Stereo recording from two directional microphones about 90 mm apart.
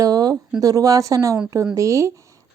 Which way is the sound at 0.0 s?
45° right (ahead or behind).